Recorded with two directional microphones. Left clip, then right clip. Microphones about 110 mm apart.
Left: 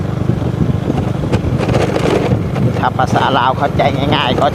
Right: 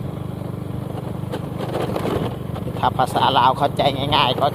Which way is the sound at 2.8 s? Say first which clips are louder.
Left 3 dB; centre (ahead or behind).